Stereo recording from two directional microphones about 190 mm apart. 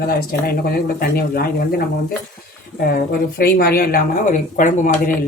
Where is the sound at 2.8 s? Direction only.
50° left (ahead or behind).